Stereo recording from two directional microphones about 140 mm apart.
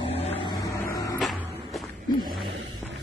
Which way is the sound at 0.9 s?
25° left (ahead or behind).